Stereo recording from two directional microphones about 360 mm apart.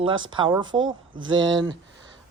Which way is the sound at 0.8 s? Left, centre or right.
Right.